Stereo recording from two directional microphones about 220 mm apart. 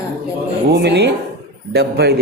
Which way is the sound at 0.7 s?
50° right (ahead or behind).